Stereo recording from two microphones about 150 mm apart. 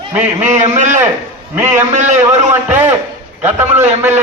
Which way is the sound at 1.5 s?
15° right (ahead or behind).